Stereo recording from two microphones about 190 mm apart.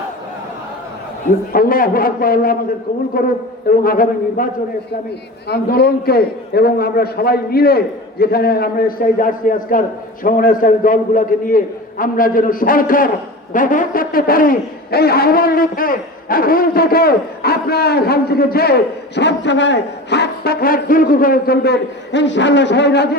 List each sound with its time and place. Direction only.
1.5 s a man's voice: 50° left (ahead or behind)
5.5 s a man's voice: 55° left (ahead or behind)